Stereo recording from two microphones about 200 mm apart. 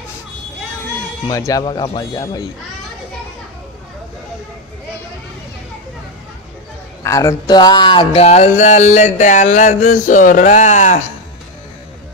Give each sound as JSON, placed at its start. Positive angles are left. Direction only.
{"t": 1.2, "sound": "speech", "side_deg": 15}
{"t": 7.0, "sound": "speech", "side_deg": 15}